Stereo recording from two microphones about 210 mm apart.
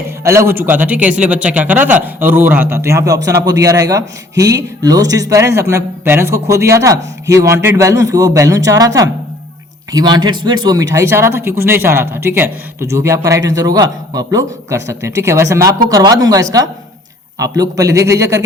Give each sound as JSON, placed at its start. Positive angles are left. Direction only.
{"t": 0.3, "sound": "speech", "side_deg": -10}